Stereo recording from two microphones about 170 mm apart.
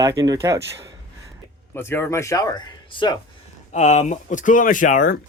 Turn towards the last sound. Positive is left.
turn(degrees=50)  # may be behind; listen again after turning